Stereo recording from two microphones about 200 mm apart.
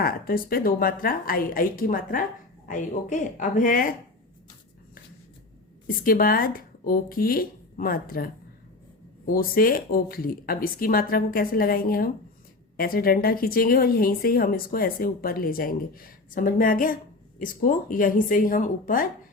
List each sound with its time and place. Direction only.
0.0 s a woman's voice: 45° left (ahead or behind)
6.1 s speech: 45° left (ahead or behind)